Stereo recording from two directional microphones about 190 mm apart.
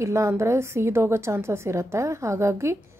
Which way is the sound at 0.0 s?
15° right (ahead or behind).